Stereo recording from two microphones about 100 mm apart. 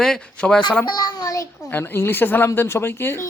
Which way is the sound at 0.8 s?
45° left (ahead or behind).